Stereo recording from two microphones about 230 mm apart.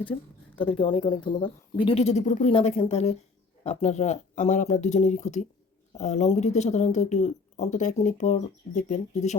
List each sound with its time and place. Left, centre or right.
0.5 s speech: left